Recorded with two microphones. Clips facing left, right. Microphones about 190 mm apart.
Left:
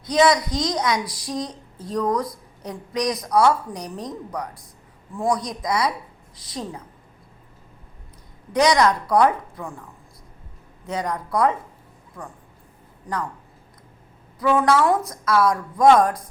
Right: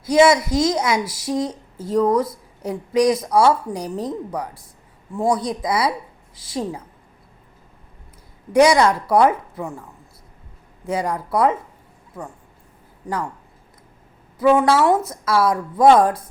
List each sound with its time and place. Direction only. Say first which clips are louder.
0.2 s a woman's voice: right 4 dB; 25° right (ahead or behind)
8.5 s a woman's voice: right 4 dB; 30° right (ahead or behind)
10.8 s a woman's voice: right 4 dB; 30° right (ahead or behind)
14.3 s a woman's voice: right 3 dB; 25° right (ahead or behind)